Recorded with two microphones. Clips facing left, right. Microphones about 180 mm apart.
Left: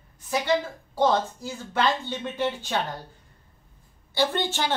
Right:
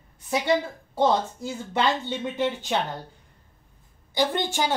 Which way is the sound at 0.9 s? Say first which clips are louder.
Even; 20° right (ahead or behind).